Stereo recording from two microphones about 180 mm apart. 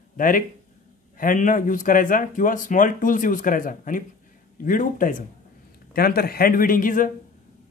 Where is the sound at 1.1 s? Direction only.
50° left (ahead or behind).